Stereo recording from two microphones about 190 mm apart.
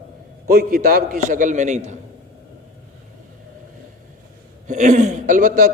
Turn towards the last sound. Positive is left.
turn(degrees=-45)  # may be behind; listen again after turning